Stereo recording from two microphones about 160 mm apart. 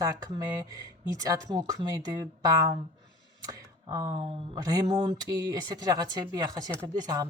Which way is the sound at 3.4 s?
20° right (ahead or behind).